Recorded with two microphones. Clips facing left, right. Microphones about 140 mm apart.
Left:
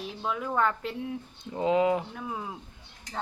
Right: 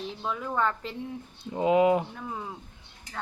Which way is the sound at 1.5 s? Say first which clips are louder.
Right 3 dB; 15° right (ahead or behind).